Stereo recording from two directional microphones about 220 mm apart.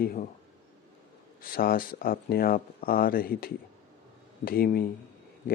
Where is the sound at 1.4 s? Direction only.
40° left (ahead or behind).